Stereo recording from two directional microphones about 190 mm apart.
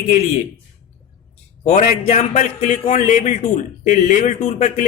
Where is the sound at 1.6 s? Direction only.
35° left (ahead or behind).